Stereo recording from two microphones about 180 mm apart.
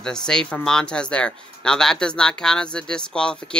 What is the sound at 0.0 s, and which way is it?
Speech, 5° left (ahead or behind).